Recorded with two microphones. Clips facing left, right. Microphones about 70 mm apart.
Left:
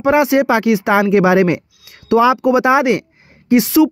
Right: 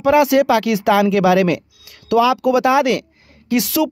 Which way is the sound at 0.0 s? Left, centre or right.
Left.